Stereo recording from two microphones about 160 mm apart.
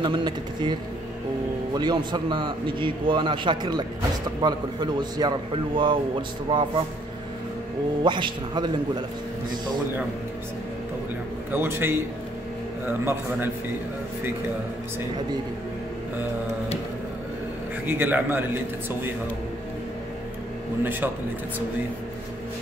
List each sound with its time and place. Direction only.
0.0 s a man's voice: 30° right (ahead or behind)
8.0 s a man's voice: 30° right (ahead or behind)
11.5 s a man's voice: 15° right (ahead or behind)
17.8 s a man's voice: 10° right (ahead or behind)
20.8 s a man's voice: 10° right (ahead or behind)